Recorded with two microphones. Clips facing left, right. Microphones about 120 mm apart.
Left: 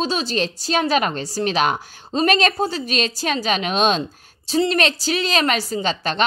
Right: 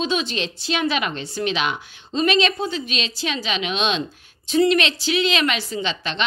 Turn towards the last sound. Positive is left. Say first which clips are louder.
# left 4 dB
turn(degrees=40)  # may be behind; listen again after turning